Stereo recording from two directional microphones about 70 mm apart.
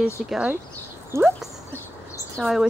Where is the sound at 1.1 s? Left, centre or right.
Right.